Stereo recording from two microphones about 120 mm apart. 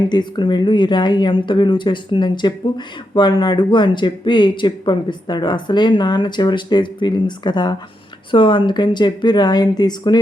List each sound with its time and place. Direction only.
0.1 s speech: 40° left (ahead or behind)